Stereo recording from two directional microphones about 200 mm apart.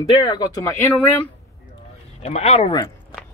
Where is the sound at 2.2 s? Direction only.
30° left (ahead or behind).